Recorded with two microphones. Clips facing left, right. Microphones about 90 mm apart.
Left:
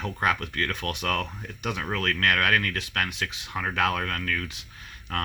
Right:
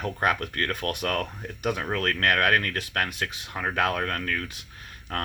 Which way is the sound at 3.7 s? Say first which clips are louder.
Right 1 dB; 30° right (ahead or behind).